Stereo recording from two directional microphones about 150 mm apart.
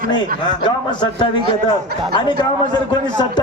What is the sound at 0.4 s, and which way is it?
A man's voice, 30° left (ahead or behind).